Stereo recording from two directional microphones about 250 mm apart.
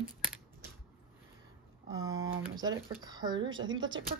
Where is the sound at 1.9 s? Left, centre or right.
Centre.